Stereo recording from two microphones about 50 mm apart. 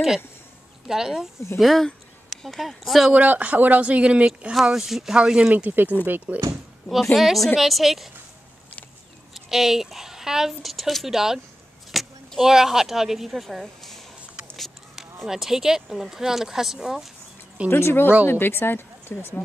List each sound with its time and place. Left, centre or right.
0.8 s speech: centre
1.6 s speech: centre
3.1 s speech: right
4.6 s speech: centre
5.1 s speech: centre
5.5 s speech: right
6.3 s speech: right
7.2 s speech: centre
9.3 s speech: centre
11.9 s a sound: centre
12.4 s speech: centre
14.6 s a sound: centre
15.2 s speech: centre
17.6 s a woman's voice: left